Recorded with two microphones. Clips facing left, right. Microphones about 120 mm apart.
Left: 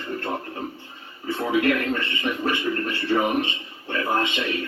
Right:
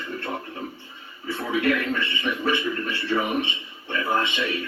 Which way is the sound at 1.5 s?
40° left (ahead or behind).